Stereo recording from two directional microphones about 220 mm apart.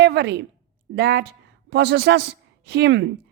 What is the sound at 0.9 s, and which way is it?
A woman's voice, 45° right (ahead or behind).